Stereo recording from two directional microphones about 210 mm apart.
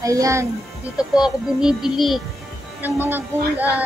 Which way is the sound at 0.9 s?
5° right (ahead or behind).